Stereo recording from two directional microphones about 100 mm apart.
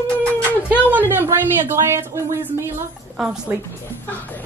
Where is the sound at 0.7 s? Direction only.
15° right (ahead or behind).